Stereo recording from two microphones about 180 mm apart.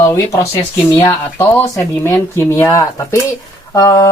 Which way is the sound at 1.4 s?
15° left (ahead or behind).